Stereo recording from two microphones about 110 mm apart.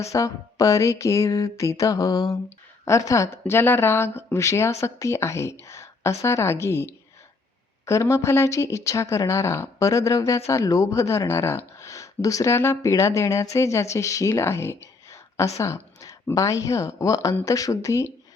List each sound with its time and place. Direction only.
0.0 s a woman's voice: 30° left (ahead or behind)